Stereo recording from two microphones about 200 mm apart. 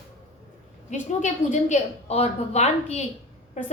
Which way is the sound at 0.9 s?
35° left (ahead or behind).